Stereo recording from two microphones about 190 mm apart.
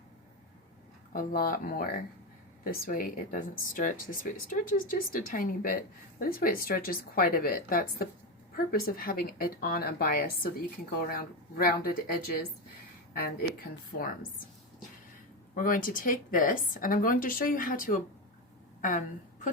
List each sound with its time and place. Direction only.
1.1 s speech: 50° left (ahead or behind)
15.5 s a woman's voice: 45° left (ahead or behind)